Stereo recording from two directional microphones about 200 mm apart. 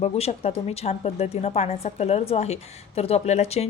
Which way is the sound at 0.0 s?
30° left (ahead or behind).